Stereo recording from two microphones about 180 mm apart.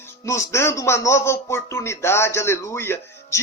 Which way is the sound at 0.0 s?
15° left (ahead or behind).